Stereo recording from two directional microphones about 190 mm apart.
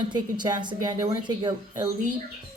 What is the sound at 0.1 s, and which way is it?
Speech, 20° right (ahead or behind).